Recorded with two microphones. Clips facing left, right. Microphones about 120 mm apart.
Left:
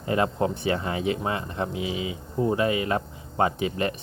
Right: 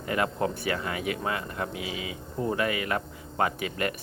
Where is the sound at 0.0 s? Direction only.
25° left (ahead or behind).